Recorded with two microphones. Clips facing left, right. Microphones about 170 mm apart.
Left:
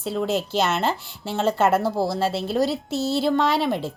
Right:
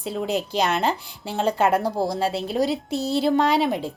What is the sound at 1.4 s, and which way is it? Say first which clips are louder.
Speech: even; 10° right (ahead or behind).